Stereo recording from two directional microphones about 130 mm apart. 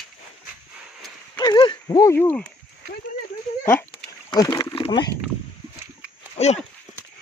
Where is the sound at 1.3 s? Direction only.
35° left (ahead or behind); by 2.4 s 15° left (ahead or behind).